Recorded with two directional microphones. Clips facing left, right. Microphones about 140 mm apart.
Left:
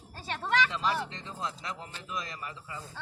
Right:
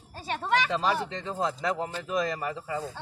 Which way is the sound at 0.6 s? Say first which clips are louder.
Right 4 dB; 45° right (ahead or behind).